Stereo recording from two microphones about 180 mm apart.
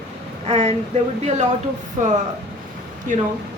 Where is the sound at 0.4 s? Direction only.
40° right (ahead or behind).